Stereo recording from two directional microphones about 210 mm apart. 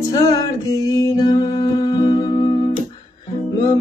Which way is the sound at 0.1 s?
20° left (ahead or behind).